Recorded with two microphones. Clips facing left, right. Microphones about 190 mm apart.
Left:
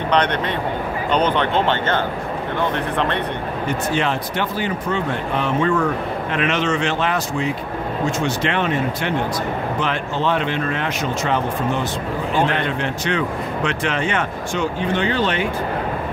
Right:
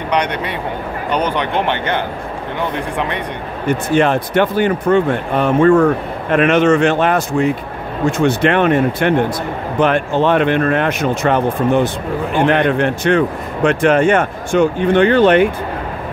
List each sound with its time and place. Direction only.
0.1 s speech: 10° right (ahead or behind)
3.6 s speech: 50° right (ahead or behind)